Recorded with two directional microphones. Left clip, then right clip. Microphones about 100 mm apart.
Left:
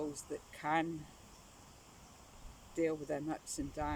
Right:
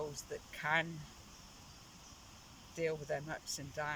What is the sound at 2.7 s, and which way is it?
Speech, 45° left (ahead or behind).